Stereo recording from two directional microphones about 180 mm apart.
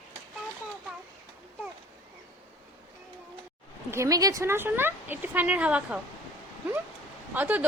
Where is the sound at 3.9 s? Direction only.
15° right (ahead or behind).